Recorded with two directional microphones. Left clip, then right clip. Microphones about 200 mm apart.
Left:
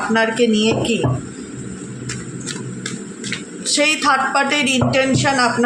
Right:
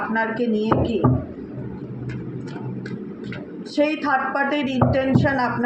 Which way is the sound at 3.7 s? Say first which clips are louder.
Left 5 dB; 55° left (ahead or behind).